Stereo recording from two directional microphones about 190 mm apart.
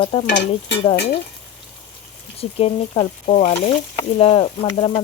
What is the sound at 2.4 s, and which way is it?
A woman's voice, 30° left (ahead or behind).